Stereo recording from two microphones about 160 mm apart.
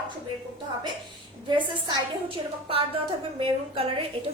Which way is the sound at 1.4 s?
30° right (ahead or behind).